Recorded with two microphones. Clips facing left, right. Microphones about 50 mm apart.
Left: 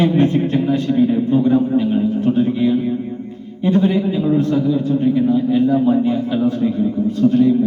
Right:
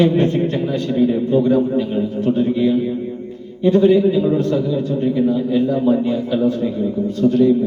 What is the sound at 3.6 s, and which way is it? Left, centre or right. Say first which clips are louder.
Speech: right 3 dB; left.